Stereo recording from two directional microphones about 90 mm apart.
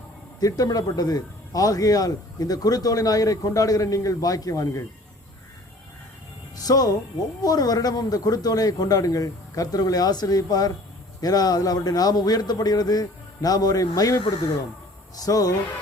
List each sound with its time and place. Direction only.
0.3 s a man's voice: 45° left (ahead or behind)
6.6 s a man's voice: 45° left (ahead or behind)